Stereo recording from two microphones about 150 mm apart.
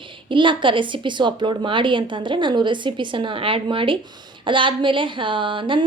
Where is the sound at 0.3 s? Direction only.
35° right (ahead or behind).